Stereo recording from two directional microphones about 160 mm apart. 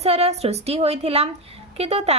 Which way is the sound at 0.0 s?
40° right (ahead or behind).